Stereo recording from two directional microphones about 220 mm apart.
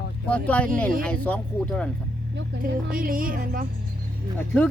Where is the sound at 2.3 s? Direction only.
40° right (ahead or behind).